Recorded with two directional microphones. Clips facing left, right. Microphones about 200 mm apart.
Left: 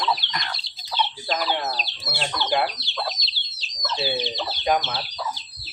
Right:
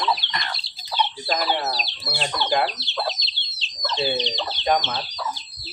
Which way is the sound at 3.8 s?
5° left (ahead or behind).